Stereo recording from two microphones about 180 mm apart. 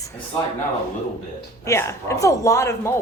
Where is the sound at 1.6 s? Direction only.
15° left (ahead or behind).